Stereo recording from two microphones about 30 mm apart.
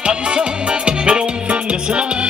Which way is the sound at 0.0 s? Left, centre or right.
Right.